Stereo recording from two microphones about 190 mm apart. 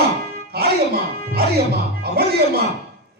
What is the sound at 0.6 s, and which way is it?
Music, 55° right (ahead or behind).